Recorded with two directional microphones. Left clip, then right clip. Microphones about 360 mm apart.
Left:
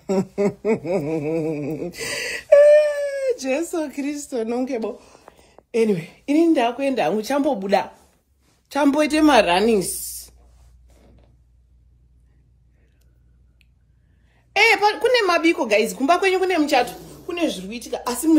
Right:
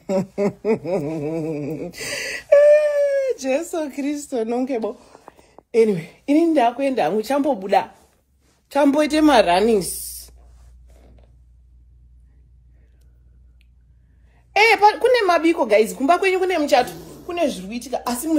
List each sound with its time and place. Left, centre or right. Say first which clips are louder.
0.0 s a sound: even; centre
6.2 s a woman's voice: right 1 dB; centre
10.4 s writing: right 1 dB; right
14.3 s a woman's voice: right 1 dB; centre
17.0 s a sound: right 2 dB; right
17.3 s a woman's voice: right 2 dB; centre